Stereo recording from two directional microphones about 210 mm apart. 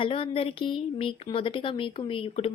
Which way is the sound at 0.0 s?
25° left (ahead or behind).